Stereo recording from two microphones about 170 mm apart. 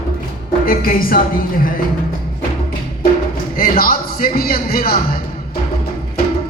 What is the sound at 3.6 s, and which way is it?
Music, 60° left (ahead or behind).